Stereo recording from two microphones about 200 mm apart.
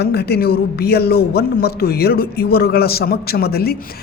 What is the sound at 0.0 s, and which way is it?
A woman's voice, 55° left (ahead or behind).